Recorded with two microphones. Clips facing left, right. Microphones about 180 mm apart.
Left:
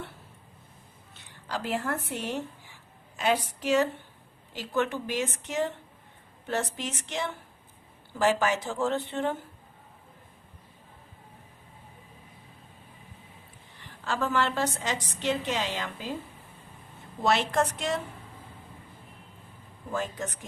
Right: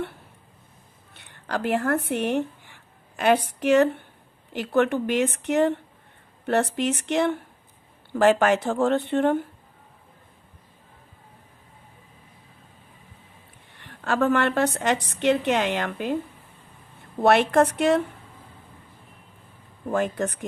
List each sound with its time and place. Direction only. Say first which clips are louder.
1.1 s a woman's voice: right 6 dB; 60° right (ahead or behind)
13.7 s a woman's voice: right 6 dB; 60° right (ahead or behind)
17.2 s a woman's voice: right 7 dB; 60° right (ahead or behind)
19.9 s a woman's voice: right 8 dB; 60° right (ahead or behind)